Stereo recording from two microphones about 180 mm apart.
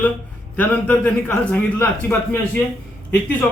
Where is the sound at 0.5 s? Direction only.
10° left (ahead or behind).